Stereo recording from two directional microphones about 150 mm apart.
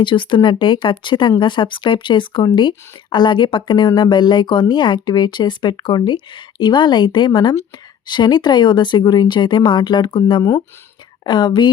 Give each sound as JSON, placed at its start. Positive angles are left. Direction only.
{"t": 0.0, "sound": "speech", "side_deg": 35}